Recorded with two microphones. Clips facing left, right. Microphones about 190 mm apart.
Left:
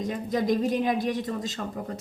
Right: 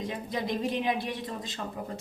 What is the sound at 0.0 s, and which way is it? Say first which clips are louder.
Speech: left 6 dB; 45° left (ahead or behind).